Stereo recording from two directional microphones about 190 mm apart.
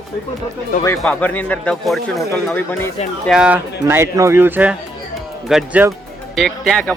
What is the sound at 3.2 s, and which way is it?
Speech, 5° right (ahead or behind).